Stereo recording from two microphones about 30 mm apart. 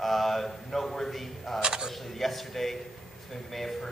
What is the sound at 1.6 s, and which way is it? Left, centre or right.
Speech, right.